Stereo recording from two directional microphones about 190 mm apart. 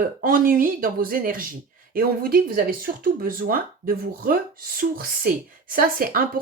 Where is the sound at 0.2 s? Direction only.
50° right (ahead or behind).